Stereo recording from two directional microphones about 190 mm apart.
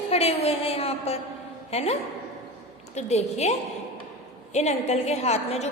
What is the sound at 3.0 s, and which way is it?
Speech, 35° left (ahead or behind).